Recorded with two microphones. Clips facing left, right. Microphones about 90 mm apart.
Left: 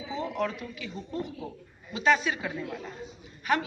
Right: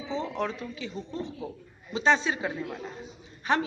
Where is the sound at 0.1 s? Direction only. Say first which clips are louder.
Even; 30° right (ahead or behind).